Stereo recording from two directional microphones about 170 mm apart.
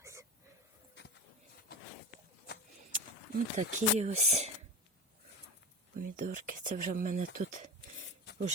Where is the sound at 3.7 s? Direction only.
40° right (ahead or behind).